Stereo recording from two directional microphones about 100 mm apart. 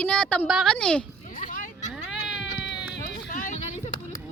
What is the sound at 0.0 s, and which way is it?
Speech, 10° left (ahead or behind).